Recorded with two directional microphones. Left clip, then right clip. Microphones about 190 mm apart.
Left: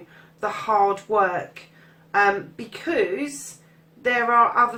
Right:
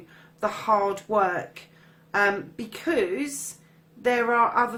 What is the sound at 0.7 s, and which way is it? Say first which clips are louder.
Speech: left 3 dB; 40° right (ahead or behind).